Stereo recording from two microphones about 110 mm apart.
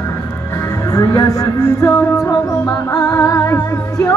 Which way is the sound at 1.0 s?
30° left (ahead or behind).